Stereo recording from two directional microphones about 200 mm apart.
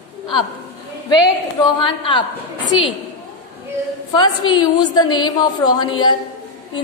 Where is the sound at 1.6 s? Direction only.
25° left (ahead or behind).